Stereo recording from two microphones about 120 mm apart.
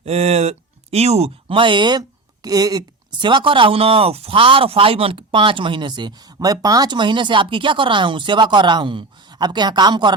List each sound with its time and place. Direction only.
0.0 s speech: 60° right (ahead or behind); by 10.2 s 40° right (ahead or behind)